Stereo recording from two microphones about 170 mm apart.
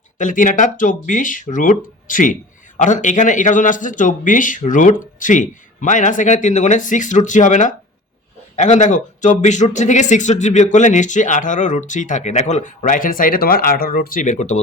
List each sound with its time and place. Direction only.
0.2 s speech: 50° left (ahead or behind)